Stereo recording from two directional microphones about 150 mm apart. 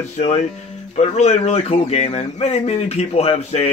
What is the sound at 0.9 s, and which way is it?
Speech, 45° left (ahead or behind).